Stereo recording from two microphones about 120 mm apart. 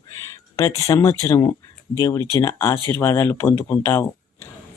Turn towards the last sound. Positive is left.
turn(degrees=25)  # may be behind; listen again after turning